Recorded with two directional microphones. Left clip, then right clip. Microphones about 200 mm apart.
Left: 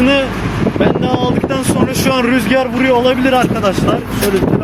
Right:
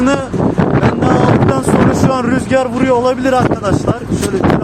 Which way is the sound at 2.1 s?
15° right (ahead or behind).